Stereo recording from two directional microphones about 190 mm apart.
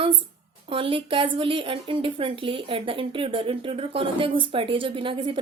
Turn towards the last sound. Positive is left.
turn(degrees=-25)  # may be behind; listen again after turning